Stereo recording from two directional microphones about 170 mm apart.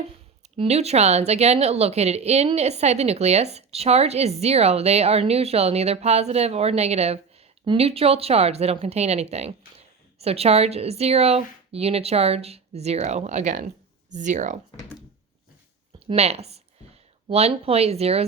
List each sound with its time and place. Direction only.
0.5 s a woman's voice: 35° right (ahead or behind)
16.0 s a woman's voice: 35° right (ahead or behind)